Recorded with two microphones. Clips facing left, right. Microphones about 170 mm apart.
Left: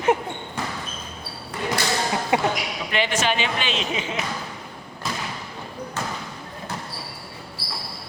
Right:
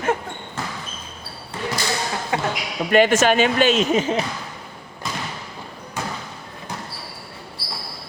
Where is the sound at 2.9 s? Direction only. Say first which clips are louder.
Right 9 dB; 50° right (ahead or behind).